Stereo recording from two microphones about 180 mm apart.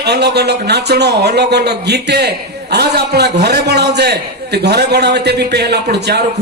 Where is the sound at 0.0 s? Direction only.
65° right (ahead or behind).